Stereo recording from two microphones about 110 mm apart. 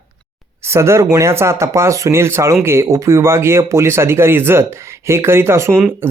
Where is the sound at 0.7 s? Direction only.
25° right (ahead or behind).